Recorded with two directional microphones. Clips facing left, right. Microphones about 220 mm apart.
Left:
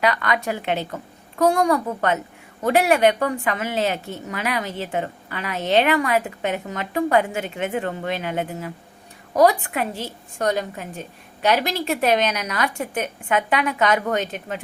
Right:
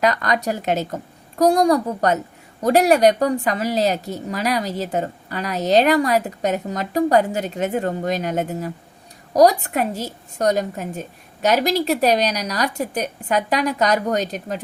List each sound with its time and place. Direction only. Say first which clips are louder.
0.0 s a woman's voice: right 2 dB; 40° right (ahead or behind)